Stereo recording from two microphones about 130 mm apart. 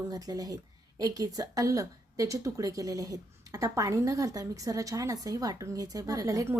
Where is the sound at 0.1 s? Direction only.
30° right (ahead or behind).